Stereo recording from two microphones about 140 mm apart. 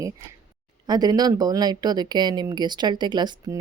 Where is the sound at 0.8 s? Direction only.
30° right (ahead or behind).